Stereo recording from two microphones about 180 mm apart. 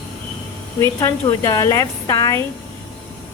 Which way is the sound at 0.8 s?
15° left (ahead or behind).